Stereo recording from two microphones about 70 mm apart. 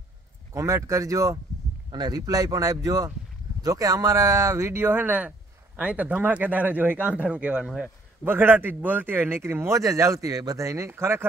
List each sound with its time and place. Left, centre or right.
0.6 s speech: right
1.9 s speech: right
4.7 s speech: right
8.3 s speech: right
11.0 s speech: right